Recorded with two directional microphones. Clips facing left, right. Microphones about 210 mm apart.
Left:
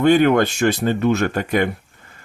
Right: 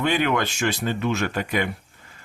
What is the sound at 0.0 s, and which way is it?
Speech, 45° left (ahead or behind).